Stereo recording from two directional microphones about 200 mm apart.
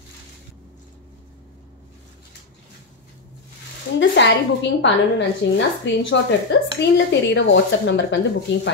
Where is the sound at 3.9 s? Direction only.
65° left (ahead or behind).